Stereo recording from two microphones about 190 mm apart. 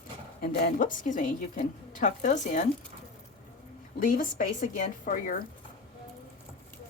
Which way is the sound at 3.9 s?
45° left (ahead or behind).